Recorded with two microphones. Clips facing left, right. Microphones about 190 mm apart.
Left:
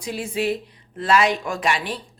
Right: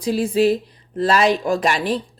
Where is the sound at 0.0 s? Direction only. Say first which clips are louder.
Right 8 dB; 35° right (ahead or behind).